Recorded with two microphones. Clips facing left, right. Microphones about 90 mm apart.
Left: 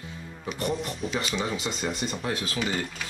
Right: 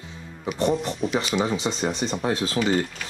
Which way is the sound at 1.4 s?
30° right (ahead or behind).